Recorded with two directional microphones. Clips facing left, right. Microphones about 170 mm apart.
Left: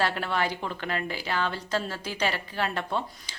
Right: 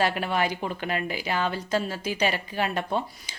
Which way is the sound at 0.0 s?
15° right (ahead or behind).